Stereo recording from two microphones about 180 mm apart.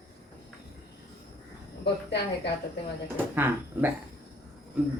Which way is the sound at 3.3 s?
10° right (ahead or behind).